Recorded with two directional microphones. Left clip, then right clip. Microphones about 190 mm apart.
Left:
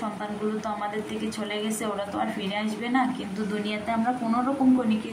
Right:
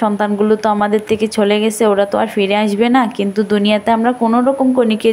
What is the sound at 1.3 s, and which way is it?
A woman's voice, 50° right (ahead or behind).